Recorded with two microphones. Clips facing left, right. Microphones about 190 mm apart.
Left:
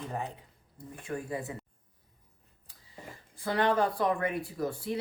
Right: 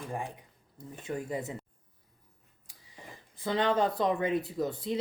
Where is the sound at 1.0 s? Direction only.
20° right (ahead or behind).